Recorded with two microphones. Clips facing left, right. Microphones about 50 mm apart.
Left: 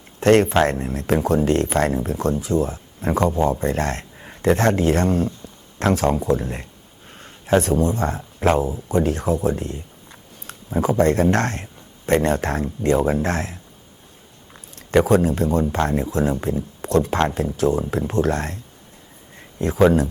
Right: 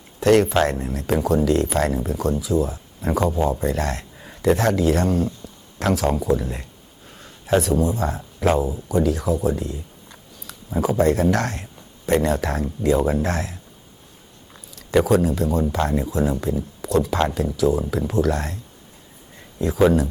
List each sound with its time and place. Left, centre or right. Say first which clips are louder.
0.2 s speech: left 1 dB; left
14.8 s speech: left 1 dB; left